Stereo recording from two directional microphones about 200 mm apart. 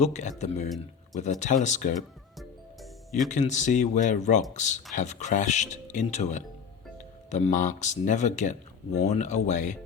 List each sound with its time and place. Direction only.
0.0 s speech: 35° left (ahead or behind)
2.4 s music: centre (ahead or behind)
3.2 s speech: 35° left (ahead or behind)